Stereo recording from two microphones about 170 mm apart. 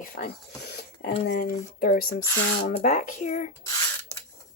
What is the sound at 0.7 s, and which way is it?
Speech, 75° left (ahead or behind).